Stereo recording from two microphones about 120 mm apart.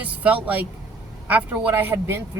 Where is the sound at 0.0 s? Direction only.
10° right (ahead or behind).